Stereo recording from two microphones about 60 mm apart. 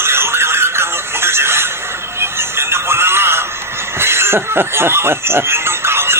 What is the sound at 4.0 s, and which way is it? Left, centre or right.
Snicker, right.